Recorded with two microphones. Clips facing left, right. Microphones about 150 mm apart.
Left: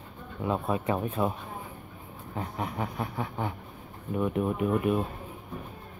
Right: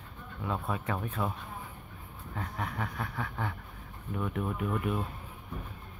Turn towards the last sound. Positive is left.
turn(degrees=20)  # may be behind; listen again after turning